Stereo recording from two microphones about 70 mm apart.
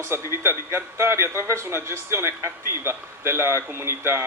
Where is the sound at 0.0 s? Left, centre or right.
Right.